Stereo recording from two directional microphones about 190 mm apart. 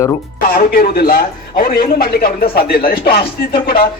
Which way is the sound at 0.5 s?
50° left (ahead or behind).